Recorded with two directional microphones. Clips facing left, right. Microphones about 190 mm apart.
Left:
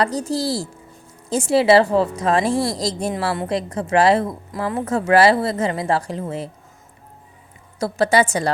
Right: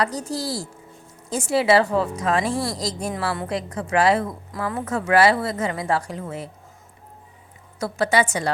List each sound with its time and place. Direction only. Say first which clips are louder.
0.0 s a woman's voice: left 4 dB; 30° left (ahead or behind)
7.8 s a woman's voice: left 4 dB; 35° left (ahead or behind)